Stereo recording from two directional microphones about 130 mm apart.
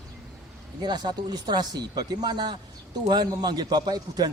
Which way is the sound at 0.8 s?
35° right (ahead or behind).